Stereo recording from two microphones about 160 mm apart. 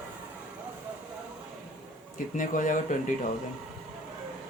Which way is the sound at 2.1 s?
55° left (ahead or behind).